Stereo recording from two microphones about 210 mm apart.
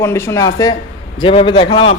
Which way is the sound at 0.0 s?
15° left (ahead or behind).